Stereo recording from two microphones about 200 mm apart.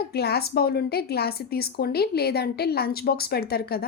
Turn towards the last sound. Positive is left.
turn(degrees=50)  # may be behind; listen again after turning